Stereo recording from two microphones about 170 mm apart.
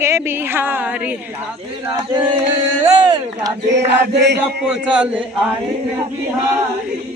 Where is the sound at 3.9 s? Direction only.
90° right.